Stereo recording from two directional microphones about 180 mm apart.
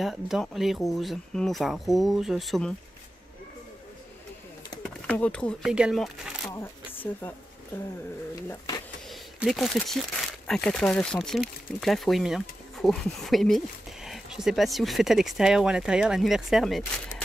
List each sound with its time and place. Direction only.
0.0 s speech: centre (ahead or behind)
5.0 s speech: 5° left (ahead or behind)
5.6 s speech: 5° right (ahead or behind)
6.4 s camera: 15° left (ahead or behind)
8.5 s speech: 20° left (ahead or behind)
9.1 s speech: centre (ahead or behind)